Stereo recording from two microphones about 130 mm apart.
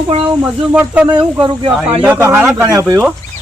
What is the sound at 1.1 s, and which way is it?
Speech, 35° right (ahead or behind).